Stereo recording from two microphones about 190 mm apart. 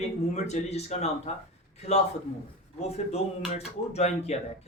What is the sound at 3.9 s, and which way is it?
Speech, 35° left (ahead or behind).